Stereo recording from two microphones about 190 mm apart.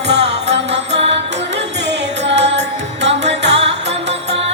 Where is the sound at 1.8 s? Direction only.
65° right (ahead or behind).